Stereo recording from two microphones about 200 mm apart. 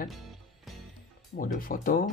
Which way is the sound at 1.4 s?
45° left (ahead or behind).